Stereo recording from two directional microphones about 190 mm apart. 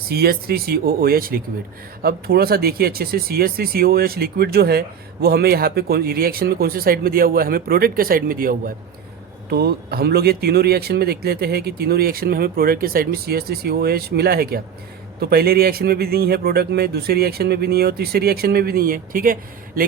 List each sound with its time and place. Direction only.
0.1 s speech: 55° right (ahead or behind)